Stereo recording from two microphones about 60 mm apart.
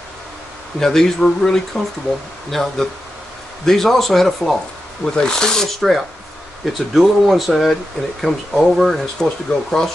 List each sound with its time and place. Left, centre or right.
0.7 s speech: centre
5.0 s speech: centre
5.8 s speech: centre